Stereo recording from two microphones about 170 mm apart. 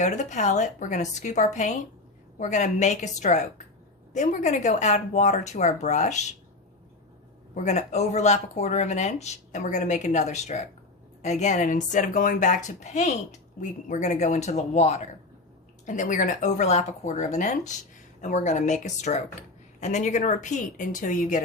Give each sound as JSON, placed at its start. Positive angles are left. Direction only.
{"t": 0.0, "sound": "speech", "side_deg": 45}
{"t": 7.5, "sound": "speech", "side_deg": 40}